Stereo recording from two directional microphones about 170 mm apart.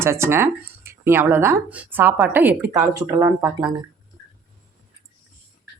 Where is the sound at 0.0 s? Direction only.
15° right (ahead or behind).